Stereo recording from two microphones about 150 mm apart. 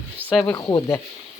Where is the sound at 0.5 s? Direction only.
25° left (ahead or behind).